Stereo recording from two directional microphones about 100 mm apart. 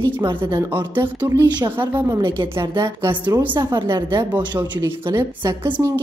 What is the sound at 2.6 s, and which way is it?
A woman's voice, 45° right (ahead or behind).